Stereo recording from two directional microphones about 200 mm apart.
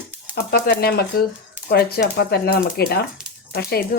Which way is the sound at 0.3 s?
50° left (ahead or behind).